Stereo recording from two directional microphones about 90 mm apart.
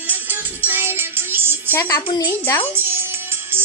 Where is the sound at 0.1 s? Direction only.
20° right (ahead or behind).